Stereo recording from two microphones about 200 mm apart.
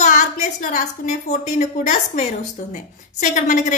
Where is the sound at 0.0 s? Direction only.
35° left (ahead or behind).